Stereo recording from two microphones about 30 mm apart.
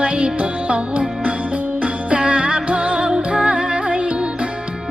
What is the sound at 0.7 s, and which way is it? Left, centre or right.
Music, right.